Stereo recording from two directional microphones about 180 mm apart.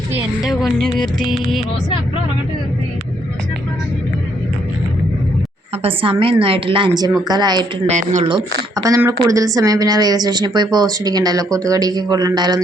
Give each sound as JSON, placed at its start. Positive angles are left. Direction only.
{"t": 0.1, "sound": "a woman's voice", "side_deg": 0}
{"t": 5.8, "sound": "a woman's voice", "side_deg": -30}
{"t": 7.9, "sound": "speech", "side_deg": -40}
{"t": 8.3, "sound": "a woman's voice", "side_deg": -20}